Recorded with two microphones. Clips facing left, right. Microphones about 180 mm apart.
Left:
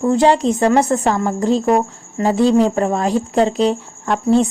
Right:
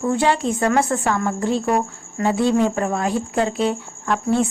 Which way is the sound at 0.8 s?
40° left (ahead or behind).